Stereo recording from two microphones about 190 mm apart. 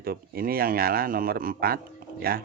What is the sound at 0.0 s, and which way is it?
Speech, 50° right (ahead or behind).